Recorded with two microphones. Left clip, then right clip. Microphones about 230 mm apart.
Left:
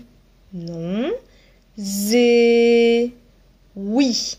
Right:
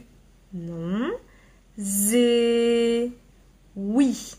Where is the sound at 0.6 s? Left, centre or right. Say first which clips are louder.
Left 4 dB; centre.